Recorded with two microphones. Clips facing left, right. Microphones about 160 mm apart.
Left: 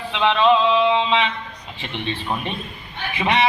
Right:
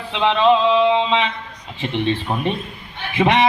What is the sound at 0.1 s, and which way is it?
Music, 30° right (ahead or behind).